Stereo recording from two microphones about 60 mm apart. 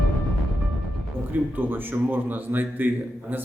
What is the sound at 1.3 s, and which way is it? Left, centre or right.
Speech, right.